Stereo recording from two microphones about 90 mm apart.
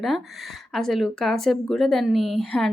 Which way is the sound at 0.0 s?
Centre (ahead or behind).